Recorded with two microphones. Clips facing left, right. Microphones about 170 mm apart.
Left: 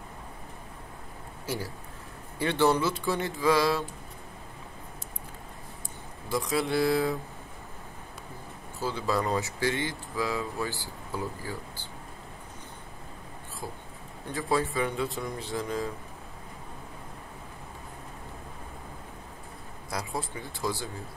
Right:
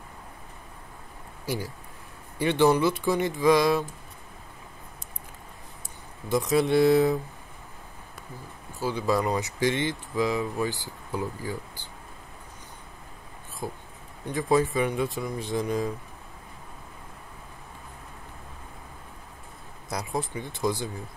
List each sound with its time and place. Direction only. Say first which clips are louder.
2.3 s speech: right 3 dB; 15° right (ahead or behind)
6.2 s speech: right 5 dB; 20° right (ahead or behind)
8.8 s speech: right 3 dB; 15° right (ahead or behind)
13.6 s speech: right 5 dB; 20° right (ahead or behind)
19.9 s speech: right 3 dB; 20° right (ahead or behind)